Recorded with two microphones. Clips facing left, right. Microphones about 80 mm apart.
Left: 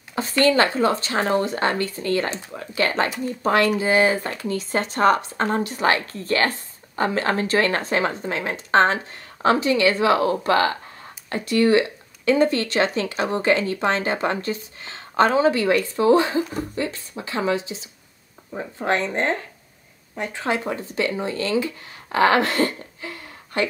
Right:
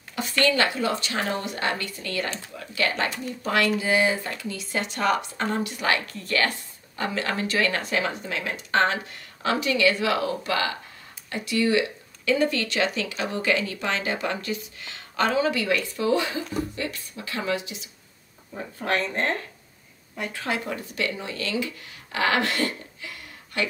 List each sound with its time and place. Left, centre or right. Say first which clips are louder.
0.1 s speech: left 5 dB; left